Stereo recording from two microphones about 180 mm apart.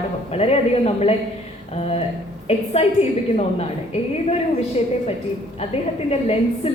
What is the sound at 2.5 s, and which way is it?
A woman's voice, 35° left (ahead or behind).